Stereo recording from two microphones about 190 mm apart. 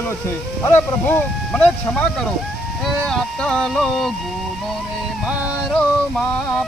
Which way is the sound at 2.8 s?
5° left (ahead or behind).